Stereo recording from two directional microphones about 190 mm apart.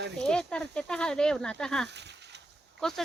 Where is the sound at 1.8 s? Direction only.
65° right (ahead or behind).